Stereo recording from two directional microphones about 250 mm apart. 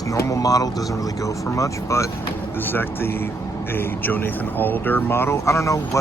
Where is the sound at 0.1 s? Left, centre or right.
Centre.